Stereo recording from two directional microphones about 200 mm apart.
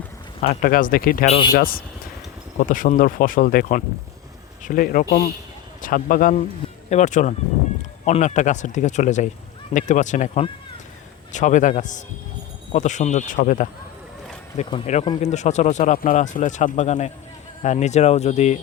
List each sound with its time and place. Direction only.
0.4 s speech: 45° left (ahead or behind)